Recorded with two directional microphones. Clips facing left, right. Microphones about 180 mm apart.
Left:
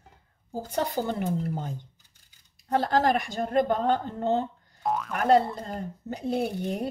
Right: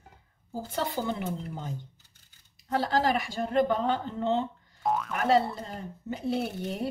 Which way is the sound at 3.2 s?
45° left (ahead or behind).